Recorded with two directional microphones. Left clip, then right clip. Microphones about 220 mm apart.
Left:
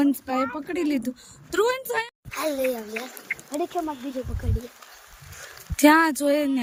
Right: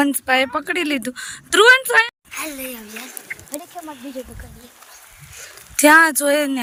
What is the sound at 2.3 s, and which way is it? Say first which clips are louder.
Speech: left 4 dB; 25° left (ahead or behind).